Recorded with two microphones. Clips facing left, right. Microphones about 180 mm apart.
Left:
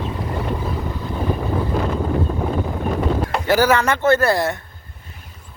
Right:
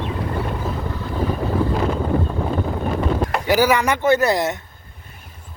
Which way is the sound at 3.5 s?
15° right (ahead or behind).